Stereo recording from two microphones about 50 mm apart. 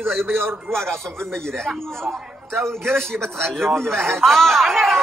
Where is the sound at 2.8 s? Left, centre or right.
Right.